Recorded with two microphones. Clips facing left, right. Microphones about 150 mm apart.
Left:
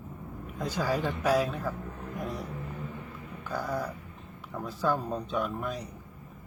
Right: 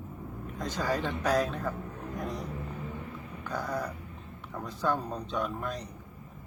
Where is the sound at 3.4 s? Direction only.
5° left (ahead or behind).